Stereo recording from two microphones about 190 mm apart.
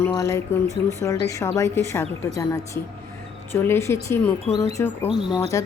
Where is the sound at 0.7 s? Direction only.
15° right (ahead or behind).